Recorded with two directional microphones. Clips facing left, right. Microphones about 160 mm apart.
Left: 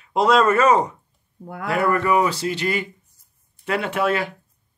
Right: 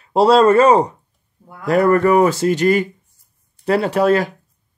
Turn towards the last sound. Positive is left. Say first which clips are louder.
# right 7 dB
turn(degrees=-40)  # may be behind; listen again after turning